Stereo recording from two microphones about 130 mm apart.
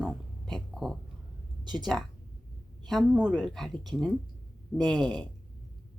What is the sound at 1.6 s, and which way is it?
Speech, 35° right (ahead or behind).